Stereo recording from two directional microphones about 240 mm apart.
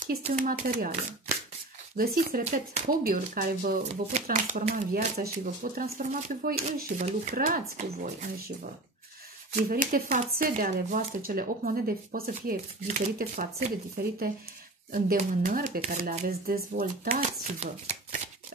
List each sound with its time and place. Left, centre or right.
0.0 s speech: right
9.5 s speech: right
17.2 s speech: right